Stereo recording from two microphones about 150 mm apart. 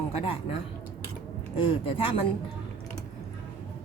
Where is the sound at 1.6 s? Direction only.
35° left (ahead or behind).